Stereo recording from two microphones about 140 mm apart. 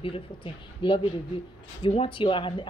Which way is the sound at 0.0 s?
40° left (ahead or behind).